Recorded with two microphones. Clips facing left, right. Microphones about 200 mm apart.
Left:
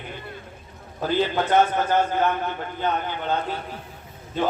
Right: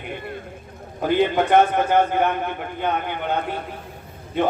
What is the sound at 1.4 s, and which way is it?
Speech, 60° right (ahead or behind).